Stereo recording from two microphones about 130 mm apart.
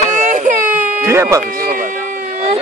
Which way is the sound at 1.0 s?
20° right (ahead or behind).